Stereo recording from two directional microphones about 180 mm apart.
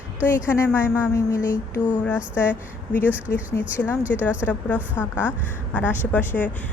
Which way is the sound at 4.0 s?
10° right (ahead or behind).